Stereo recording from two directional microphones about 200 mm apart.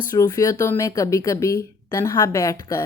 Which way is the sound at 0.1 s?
15° left (ahead or behind).